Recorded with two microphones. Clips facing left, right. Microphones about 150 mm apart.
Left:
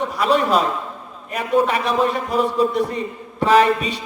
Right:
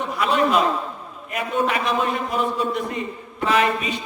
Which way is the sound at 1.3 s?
35° left (ahead or behind).